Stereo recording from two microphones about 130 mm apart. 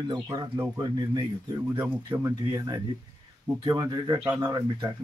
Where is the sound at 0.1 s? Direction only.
30° right (ahead or behind).